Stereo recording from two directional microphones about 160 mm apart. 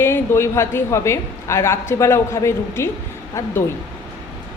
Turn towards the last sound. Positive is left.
turn(degrees=20)  # may be behind; listen again after turning